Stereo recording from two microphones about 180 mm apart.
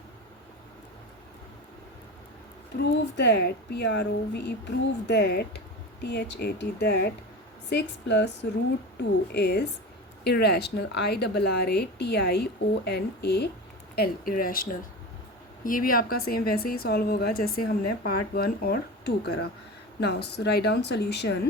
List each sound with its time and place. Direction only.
2.7 s a woman's voice: 70° left (ahead or behind)